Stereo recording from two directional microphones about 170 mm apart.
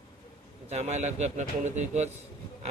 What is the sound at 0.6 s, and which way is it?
A man's voice, 40° right (ahead or behind).